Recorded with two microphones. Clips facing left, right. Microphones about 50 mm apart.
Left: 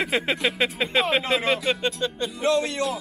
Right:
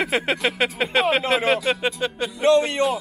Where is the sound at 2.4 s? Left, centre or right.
Right.